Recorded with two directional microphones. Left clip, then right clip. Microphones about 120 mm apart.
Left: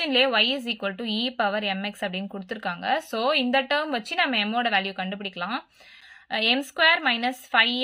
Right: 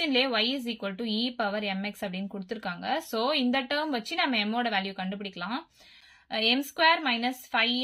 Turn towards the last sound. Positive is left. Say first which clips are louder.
# left 5 dB
turn(degrees=40)  # may be behind; listen again after turning